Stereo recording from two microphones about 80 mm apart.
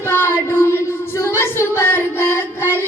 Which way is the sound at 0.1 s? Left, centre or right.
Left.